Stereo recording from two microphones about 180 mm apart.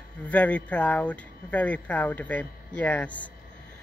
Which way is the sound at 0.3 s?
10° left (ahead or behind).